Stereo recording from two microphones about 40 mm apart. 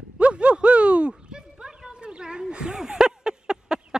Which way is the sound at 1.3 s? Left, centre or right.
Right.